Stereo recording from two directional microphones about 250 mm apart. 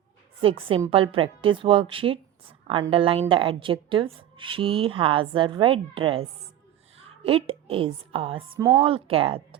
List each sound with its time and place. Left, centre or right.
0.4 s a woman's voice: right
7.3 s a woman's voice: right